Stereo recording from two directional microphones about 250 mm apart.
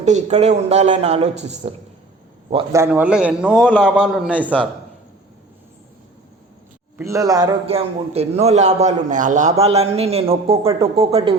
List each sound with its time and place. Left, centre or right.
0.0 s a man's voice: right
2.8 s a man's voice: centre
6.9 s a man's voice: centre